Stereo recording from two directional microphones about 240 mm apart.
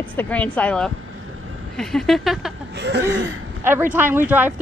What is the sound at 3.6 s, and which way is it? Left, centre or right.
Speech, centre.